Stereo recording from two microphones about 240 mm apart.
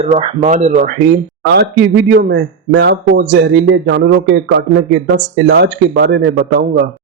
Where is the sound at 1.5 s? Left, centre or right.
Right.